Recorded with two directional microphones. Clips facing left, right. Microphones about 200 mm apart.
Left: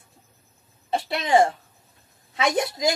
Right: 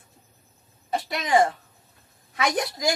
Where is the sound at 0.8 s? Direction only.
30° left (ahead or behind).